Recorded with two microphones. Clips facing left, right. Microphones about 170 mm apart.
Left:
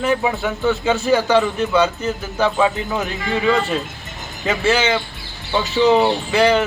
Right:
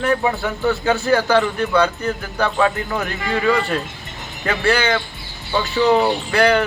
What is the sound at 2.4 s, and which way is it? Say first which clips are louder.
Speech: left 1 dB; 10° left (ahead or behind).